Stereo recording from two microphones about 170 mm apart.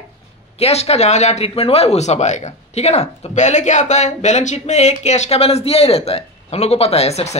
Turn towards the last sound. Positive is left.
turn(degrees=40)  # may be behind; listen again after turning